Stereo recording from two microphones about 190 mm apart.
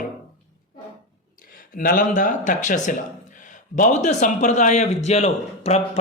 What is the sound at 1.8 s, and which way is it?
A man's voice, 45° left (ahead or behind).